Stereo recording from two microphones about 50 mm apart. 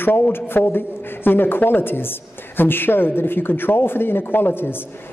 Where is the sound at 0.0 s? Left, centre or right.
Left.